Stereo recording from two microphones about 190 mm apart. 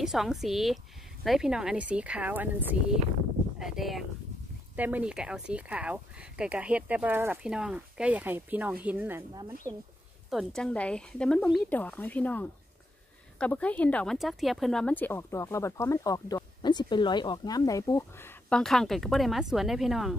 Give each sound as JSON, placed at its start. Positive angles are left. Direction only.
{"t": 0.0, "sound": "speech", "side_deg": 0}
{"t": 10.3, "sound": "speech", "side_deg": 5}